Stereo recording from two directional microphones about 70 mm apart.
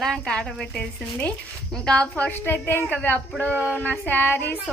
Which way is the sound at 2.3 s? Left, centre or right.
Left.